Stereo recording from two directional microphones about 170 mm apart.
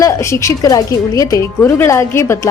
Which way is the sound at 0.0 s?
15° left (ahead or behind).